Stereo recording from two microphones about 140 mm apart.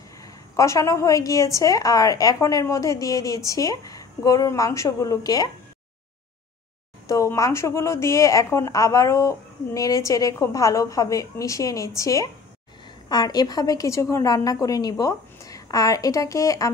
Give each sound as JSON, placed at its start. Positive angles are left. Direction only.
{"t": 0.2, "sound": "a woman's voice", "side_deg": 20}
{"t": 7.1, "sound": "a woman's voice", "side_deg": 25}